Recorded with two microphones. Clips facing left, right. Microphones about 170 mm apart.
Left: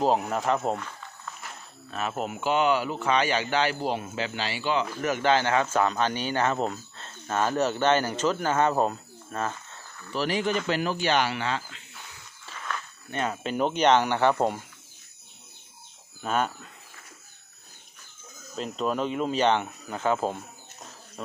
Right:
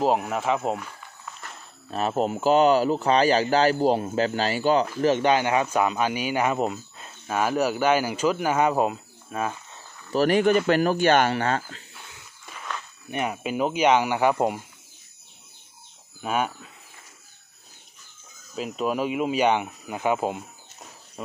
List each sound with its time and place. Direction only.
0.0 s speech: 5° right (ahead or behind)
1.9 s speech: 35° right (ahead or behind)
5.1 s speech: 15° right (ahead or behind)
10.1 s speech: 50° right (ahead or behind)
12.4 s speech: 15° right (ahead or behind)
16.2 s speech: 10° right (ahead or behind)
18.6 s speech: 5° right (ahead or behind)